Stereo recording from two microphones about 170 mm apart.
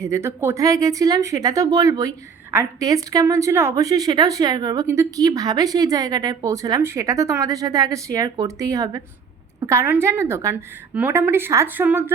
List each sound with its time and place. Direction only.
0.0 s a woman's voice: 15° right (ahead or behind)